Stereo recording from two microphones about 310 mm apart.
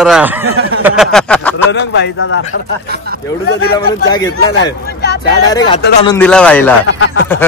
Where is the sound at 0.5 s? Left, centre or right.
Right.